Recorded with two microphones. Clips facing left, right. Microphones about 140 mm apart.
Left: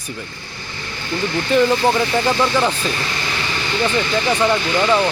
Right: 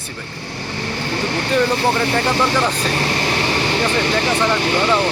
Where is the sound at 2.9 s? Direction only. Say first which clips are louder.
Right 4 dB; 70° right (ahead or behind).